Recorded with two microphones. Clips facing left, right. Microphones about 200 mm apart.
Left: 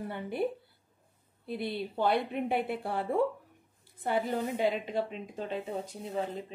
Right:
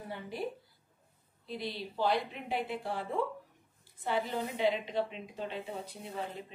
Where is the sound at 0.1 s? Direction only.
55° left (ahead or behind).